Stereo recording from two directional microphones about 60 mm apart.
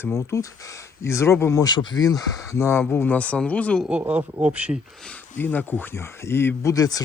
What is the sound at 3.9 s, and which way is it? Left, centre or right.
Speech, right.